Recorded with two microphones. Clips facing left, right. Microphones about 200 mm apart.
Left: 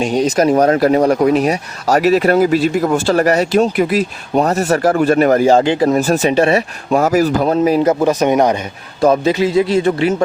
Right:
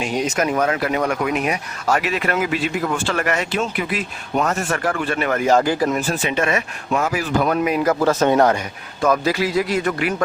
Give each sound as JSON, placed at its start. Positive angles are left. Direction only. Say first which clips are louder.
{"t": 0.0, "sound": "speech", "louder": "left 7 dB", "side_deg": 35}
{"t": 6.0, "sound": "speech", "louder": "left 8 dB", "side_deg": 40}
{"t": 9.0, "sound": "a man's voice", "louder": "left 6 dB", "side_deg": 25}